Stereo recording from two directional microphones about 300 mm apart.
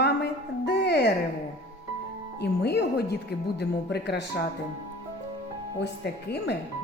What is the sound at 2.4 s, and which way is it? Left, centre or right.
A woman's voice, left.